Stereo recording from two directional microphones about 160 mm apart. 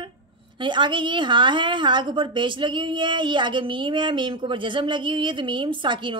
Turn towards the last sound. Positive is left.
turn(degrees=-30)  # may be behind; listen again after turning